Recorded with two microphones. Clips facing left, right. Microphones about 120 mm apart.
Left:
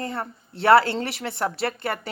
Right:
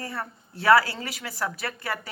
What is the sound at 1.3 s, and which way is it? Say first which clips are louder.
Speech: left 3 dB; 25° left (ahead or behind).